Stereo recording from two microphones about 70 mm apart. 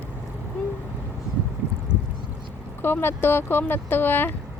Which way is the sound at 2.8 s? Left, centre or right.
Left.